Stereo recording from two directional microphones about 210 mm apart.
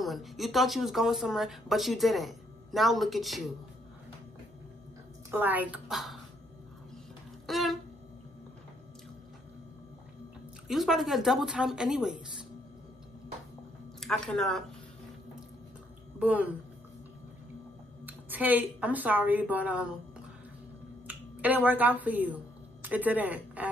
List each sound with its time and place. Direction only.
0.0 s speech: centre (ahead or behind)
5.3 s speech: 10° right (ahead or behind)
7.4 s a sound: centre (ahead or behind)
10.7 s speech: centre (ahead or behind)
13.9 s speech: 5° left (ahead or behind)
16.2 s speech: 5° right (ahead or behind)
18.0 s speech: 10° right (ahead or behind)